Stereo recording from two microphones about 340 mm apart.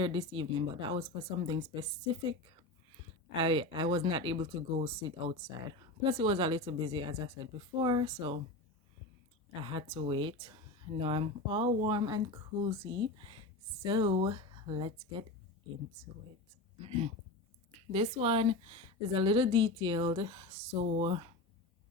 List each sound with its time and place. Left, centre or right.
0.0 s speech: centre
3.4 s speech: centre
9.6 s speech: centre
17.9 s speech: centre